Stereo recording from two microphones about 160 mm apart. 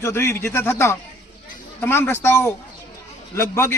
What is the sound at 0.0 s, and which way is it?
A man's voice, 15° left (ahead or behind).